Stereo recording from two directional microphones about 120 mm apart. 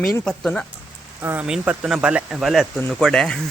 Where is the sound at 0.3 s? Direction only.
5° left (ahead or behind).